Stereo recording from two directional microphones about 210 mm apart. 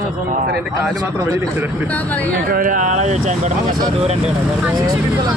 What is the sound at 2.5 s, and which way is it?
A man's voice, 40° right (ahead or behind).